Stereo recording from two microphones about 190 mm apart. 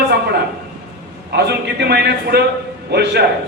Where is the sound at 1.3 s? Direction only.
60° right (ahead or behind).